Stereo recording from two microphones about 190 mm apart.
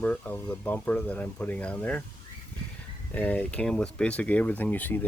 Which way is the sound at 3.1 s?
10° left (ahead or behind).